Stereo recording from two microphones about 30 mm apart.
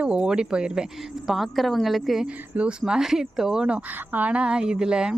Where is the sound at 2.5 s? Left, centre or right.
Right.